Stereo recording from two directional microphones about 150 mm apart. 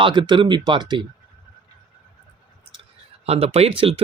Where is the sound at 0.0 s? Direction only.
30° right (ahead or behind).